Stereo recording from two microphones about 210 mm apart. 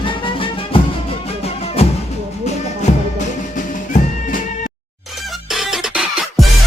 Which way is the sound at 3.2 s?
35° left (ahead or behind).